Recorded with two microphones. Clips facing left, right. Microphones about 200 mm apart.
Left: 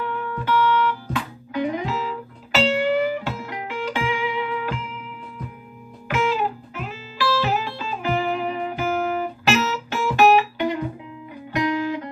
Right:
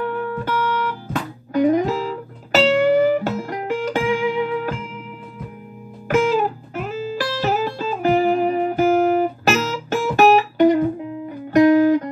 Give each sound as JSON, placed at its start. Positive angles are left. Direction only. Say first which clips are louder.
{"t": 0.0, "sound": "music", "louder": "right 4 dB", "side_deg": -45}
{"t": 6.0, "sound": "music", "louder": "right 5 dB", "side_deg": -45}